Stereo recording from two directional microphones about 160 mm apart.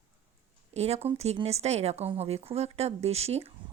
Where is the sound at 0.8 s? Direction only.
40° right (ahead or behind).